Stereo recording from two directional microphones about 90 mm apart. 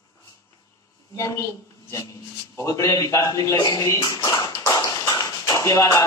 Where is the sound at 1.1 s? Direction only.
35° left (ahead or behind).